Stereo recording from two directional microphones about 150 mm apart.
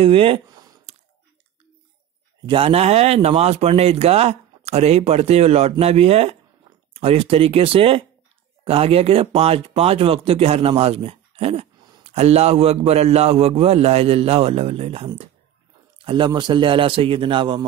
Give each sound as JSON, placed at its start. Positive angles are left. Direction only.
{"t": 0.0, "sound": "speech", "side_deg": -35}
{"t": 2.4, "sound": "speech", "side_deg": -35}